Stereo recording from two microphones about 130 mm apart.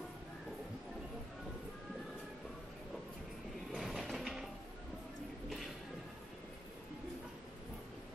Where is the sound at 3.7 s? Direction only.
Centre (ahead or behind).